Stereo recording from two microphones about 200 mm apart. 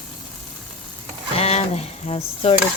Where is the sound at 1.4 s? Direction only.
30° left (ahead or behind).